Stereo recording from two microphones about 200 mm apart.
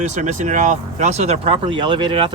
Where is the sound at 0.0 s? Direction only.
35° right (ahead or behind).